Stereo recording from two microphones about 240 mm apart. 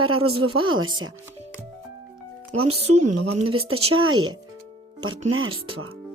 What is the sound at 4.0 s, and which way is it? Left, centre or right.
Speech, right.